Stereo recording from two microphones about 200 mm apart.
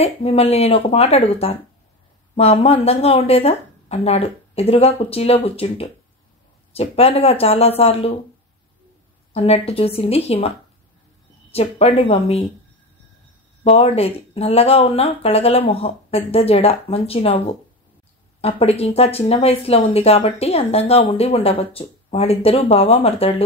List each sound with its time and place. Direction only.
0.0 s speech: 30° left (ahead or behind)
9.3 s speech: 30° left (ahead or behind)
11.5 s speech: 30° left (ahead or behind)
13.7 s speech: 30° left (ahead or behind)